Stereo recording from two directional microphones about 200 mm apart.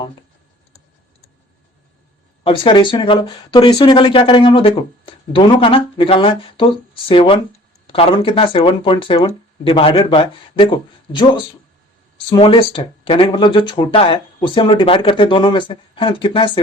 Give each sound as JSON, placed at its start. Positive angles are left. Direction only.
{"t": 2.4, "sound": "speech", "side_deg": 25}